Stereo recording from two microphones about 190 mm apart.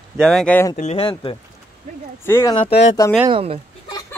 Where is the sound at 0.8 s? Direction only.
30° left (ahead or behind).